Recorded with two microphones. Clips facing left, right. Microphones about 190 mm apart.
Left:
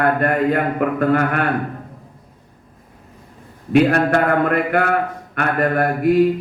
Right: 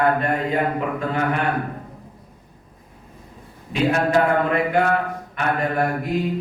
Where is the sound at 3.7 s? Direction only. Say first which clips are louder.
Left 5 dB; 60° left (ahead or behind).